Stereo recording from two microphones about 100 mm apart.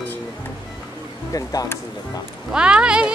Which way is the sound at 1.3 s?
35° left (ahead or behind).